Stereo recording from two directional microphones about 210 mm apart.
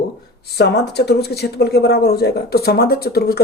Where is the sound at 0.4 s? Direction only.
50° left (ahead or behind).